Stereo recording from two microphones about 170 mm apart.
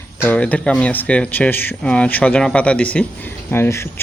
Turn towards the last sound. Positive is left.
turn(degrees=15)  # may be behind; listen again after turning